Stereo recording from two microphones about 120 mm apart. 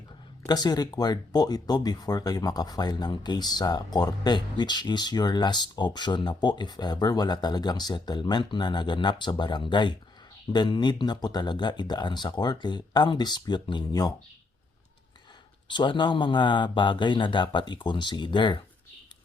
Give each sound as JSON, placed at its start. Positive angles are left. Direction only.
{"t": 0.4, "sound": "speech", "side_deg": 35}
{"t": 15.6, "sound": "speech", "side_deg": 40}